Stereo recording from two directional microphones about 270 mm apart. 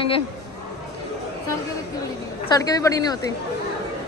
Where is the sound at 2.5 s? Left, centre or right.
Centre.